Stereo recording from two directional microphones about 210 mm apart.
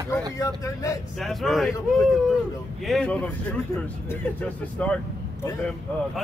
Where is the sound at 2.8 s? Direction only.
5° left (ahead or behind).